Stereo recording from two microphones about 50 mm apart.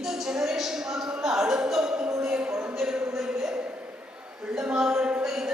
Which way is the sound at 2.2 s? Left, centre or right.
Centre.